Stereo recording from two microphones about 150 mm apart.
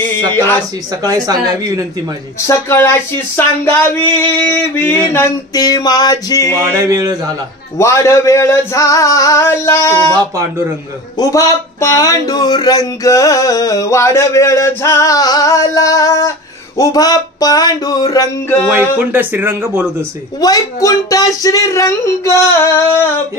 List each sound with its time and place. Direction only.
0.3 s a sound: 15° left (ahead or behind)
1.0 s speech: 25° right (ahead or behind)
2.4 s a sound: 15° left (ahead or behind)
5.1 s speech: 20° left (ahead or behind)
6.6 s speech: 20° right (ahead or behind)
7.7 s speech: 20° left (ahead or behind)
10.1 s speech: 25° right (ahead or behind)
11.1 s speech: 20° left (ahead or behind)
18.7 s speech: 15° right (ahead or behind)
20.3 s speech: 25° left (ahead or behind)